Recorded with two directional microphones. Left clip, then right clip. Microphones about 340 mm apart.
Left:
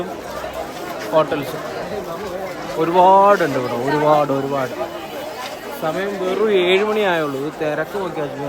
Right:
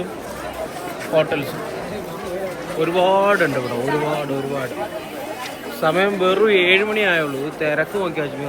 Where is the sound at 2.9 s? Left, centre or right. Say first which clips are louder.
Left 5 dB; centre.